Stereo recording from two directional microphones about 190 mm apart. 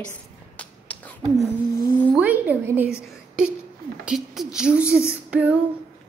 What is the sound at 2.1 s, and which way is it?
A woman's voice, 10° right (ahead or behind).